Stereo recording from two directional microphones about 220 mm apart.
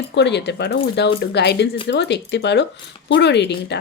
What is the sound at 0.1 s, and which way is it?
Speech, 50° left (ahead or behind).